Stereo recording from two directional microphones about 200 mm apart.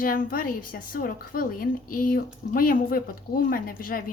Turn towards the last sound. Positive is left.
turn(degrees=45)  # may be behind; listen again after turning